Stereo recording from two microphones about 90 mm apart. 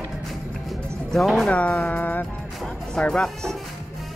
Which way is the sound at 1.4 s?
15° left (ahead or behind).